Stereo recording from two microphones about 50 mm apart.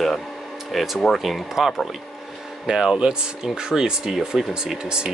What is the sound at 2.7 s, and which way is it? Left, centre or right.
Speech, centre.